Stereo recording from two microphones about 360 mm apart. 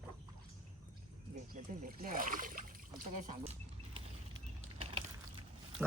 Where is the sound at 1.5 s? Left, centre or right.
Right.